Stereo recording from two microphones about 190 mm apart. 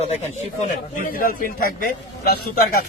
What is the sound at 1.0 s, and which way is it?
A man's voice, 50° left (ahead or behind).